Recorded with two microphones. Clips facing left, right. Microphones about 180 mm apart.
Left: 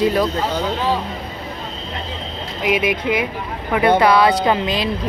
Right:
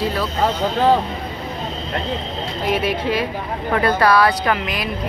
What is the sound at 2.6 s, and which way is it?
Speech, 15° left (ahead or behind).